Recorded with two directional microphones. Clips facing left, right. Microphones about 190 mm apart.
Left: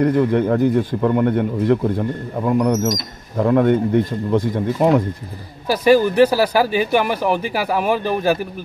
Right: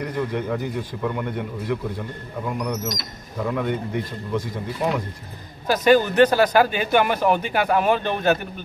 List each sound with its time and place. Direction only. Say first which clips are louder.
0.0 s speech: left 10 dB; 55° left (ahead or behind)
5.7 s speech: left 3 dB; 10° left (ahead or behind)